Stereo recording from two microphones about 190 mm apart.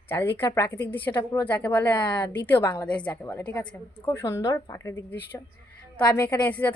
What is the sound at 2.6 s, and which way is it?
A woman's voice, 25° left (ahead or behind).